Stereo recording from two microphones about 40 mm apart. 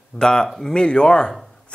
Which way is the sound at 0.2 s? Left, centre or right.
Centre.